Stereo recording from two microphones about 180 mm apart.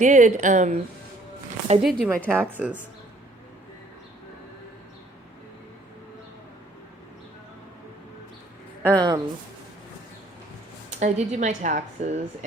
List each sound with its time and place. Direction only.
0.0 s speech: 45° right (ahead or behind)
1.8 s speech: 5° right (ahead or behind)
8.8 s speech: 20° right (ahead or behind)
11.0 s speech: 40° right (ahead or behind)